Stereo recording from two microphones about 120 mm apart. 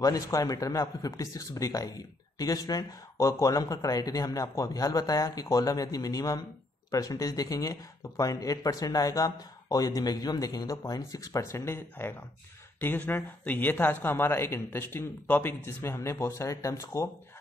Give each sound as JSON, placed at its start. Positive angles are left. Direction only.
{"t": 0.0, "sound": "speech", "side_deg": 30}